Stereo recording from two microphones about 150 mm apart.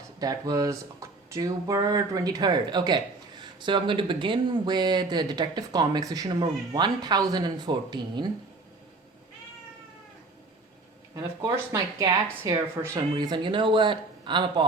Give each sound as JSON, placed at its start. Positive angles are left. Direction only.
{"t": 0.2, "sound": "speech", "side_deg": -25}
{"t": 11.1, "sound": "speech", "side_deg": -20}
{"t": 13.1, "sound": "speech", "side_deg": -30}